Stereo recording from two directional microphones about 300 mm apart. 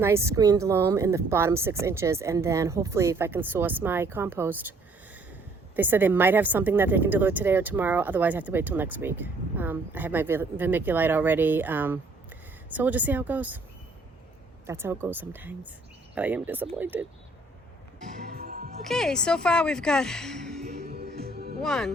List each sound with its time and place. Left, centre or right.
0.0 s a woman's voice: centre
5.7 s a woman's voice: centre
14.7 s a woman's voice: centre
18.0 s music: right
18.8 s a woman's voice: centre
20.7 s music: right
21.6 s a woman's voice: centre